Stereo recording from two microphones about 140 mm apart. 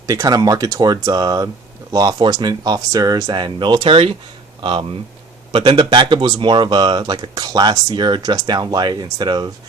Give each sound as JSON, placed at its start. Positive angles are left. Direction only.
{"t": 0.1, "sound": "speech", "side_deg": -25}